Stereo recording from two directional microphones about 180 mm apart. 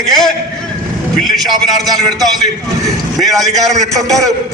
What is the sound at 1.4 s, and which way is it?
Speech, 20° right (ahead or behind).